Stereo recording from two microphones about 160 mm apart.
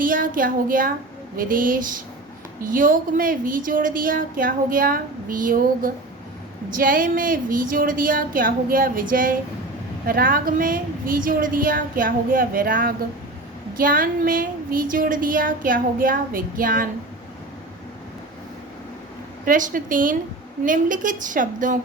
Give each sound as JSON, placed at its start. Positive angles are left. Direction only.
{"t": 0.0, "sound": "a woman's voice", "side_deg": -60}
{"t": 19.5, "sound": "a woman's voice", "side_deg": -55}